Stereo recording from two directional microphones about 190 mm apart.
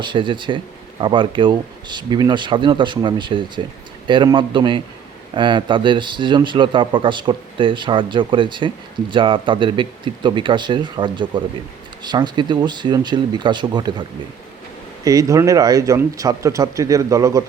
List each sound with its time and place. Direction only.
0.0 s a man's voice: 25° right (ahead or behind)
15.0 s speech: 20° right (ahead or behind)